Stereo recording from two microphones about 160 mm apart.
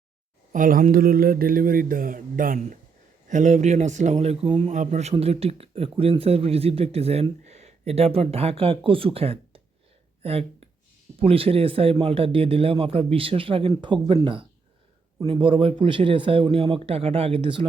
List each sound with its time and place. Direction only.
0.5 s speech: 55° right (ahead or behind); by 4.7 s 35° right (ahead or behind)
4.7 s speech: 50° right (ahead or behind)
11.2 s speech: 35° right (ahead or behind)